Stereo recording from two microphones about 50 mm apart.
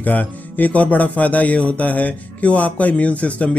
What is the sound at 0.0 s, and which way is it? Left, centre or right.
A man's voice, left.